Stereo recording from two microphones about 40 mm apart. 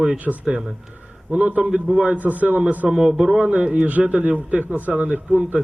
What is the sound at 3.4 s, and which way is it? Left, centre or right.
A man's voice, right.